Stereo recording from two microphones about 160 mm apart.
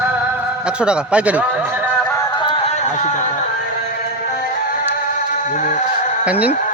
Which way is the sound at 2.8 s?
45° left (ahead or behind).